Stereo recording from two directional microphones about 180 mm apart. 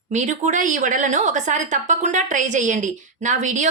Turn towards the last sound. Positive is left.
turn(degrees=-45)  # may be behind; listen again after turning